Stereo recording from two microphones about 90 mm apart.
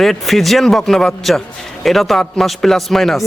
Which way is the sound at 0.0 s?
Centre (ahead or behind).